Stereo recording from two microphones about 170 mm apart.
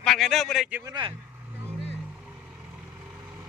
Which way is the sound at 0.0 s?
Centre (ahead or behind).